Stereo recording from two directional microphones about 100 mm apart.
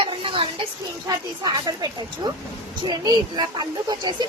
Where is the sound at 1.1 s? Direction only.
40° right (ahead or behind).